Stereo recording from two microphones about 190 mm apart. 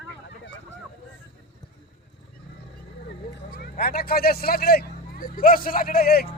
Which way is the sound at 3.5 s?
55° left (ahead or behind).